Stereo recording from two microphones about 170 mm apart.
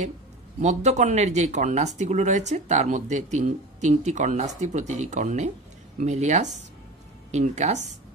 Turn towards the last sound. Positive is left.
turn(degrees=-40)  # may be behind; listen again after turning